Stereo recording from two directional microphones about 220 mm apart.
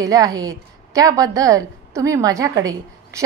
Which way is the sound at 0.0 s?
15° right (ahead or behind).